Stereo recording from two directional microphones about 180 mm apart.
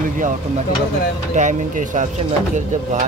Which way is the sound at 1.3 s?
40° right (ahead or behind).